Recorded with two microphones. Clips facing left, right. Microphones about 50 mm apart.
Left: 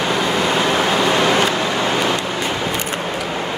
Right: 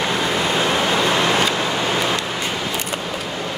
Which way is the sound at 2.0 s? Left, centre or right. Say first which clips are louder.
Left 2 dB; centre.